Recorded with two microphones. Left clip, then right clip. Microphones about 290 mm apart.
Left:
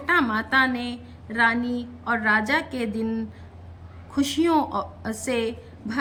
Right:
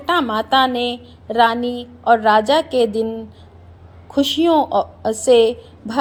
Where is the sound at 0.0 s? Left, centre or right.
Centre.